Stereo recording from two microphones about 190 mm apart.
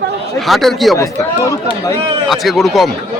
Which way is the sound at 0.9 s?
15° left (ahead or behind).